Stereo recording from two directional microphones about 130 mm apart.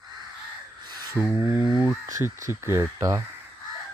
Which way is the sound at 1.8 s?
20° right (ahead or behind).